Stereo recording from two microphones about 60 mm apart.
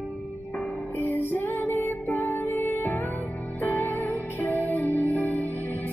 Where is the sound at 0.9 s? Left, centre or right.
Left.